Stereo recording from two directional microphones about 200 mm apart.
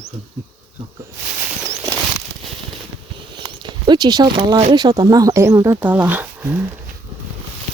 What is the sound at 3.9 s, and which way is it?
Speech, 20° right (ahead or behind).